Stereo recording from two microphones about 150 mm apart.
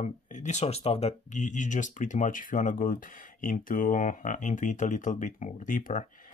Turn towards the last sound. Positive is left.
turn(degrees=60)  # may be behind; listen again after turning